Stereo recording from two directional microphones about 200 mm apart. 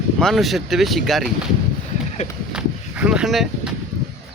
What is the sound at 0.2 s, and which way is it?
Speech, centre (ahead or behind).